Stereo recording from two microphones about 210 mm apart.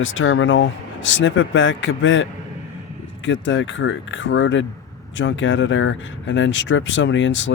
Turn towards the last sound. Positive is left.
turn(degrees=60)  # may be behind; listen again after turning